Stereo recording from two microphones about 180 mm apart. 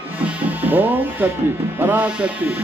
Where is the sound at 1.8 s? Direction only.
10° right (ahead or behind).